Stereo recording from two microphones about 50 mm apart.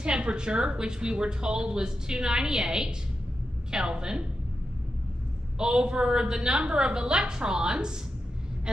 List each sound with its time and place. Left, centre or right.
0.0 s a woman's voice: right
5.6 s a woman's voice: centre